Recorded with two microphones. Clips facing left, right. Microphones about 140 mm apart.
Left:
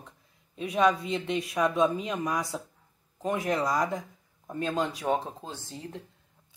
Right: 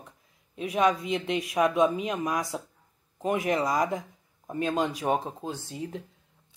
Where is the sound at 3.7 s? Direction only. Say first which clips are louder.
Right 1 dB; 15° right (ahead or behind).